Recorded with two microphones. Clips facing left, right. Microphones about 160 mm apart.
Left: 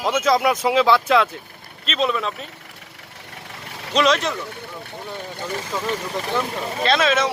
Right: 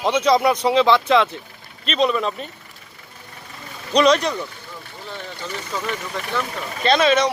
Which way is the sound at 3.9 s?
Centre (ahead or behind).